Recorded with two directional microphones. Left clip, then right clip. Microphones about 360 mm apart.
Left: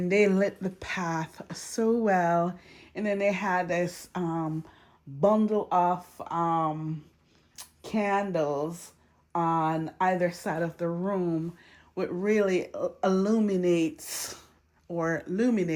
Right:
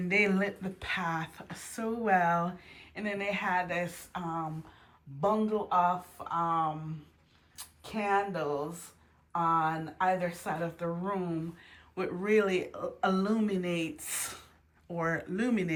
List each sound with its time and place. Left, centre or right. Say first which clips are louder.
0.1 s speech: left 4 dB; centre